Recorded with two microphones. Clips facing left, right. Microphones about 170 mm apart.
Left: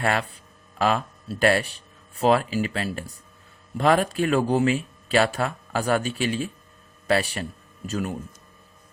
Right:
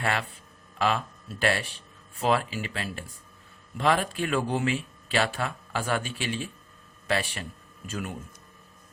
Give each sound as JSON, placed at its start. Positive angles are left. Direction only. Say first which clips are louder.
{"t": 0.0, "sound": "speech", "louder": "left 4 dB", "side_deg": 45}